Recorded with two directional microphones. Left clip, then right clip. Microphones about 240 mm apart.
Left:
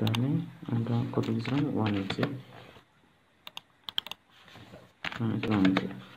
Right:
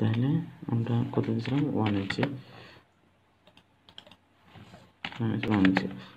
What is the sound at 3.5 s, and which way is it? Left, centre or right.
Computer keyboard, left.